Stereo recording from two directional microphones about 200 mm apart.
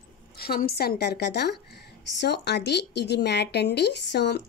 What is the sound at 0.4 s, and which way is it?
A woman's voice, 50° left (ahead or behind).